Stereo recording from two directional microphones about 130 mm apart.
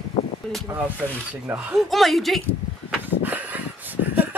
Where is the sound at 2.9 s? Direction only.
15° right (ahead or behind).